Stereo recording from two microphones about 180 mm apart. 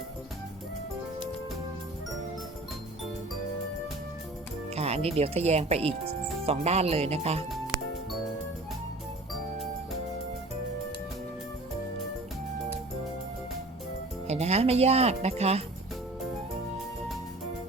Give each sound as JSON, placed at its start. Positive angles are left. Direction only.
{"t": 4.7, "sound": "speech", "side_deg": -35}
{"t": 14.3, "sound": "speech", "side_deg": -35}